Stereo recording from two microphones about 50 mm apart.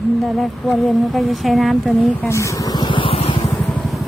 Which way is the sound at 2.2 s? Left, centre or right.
Left.